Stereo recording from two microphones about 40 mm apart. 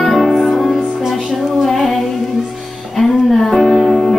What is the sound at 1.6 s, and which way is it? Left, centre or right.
Female singing, centre.